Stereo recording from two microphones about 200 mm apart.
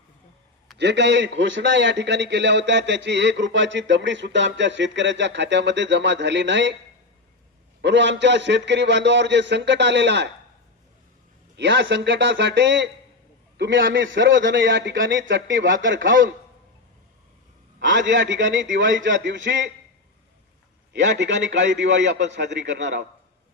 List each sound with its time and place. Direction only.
0.8 s a man's voice: 60° right (ahead or behind)
7.8 s a man's voice: 60° right (ahead or behind)
11.5 s a man's voice: 60° right (ahead or behind)
17.7 s a man's voice: 65° right (ahead or behind)
20.9 s a man's voice: 60° right (ahead or behind)